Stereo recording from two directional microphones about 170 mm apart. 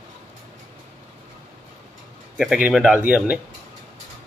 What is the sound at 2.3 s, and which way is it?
Speech, 5° right (ahead or behind).